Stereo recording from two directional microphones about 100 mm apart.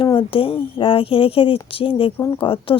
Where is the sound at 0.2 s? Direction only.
60° left (ahead or behind).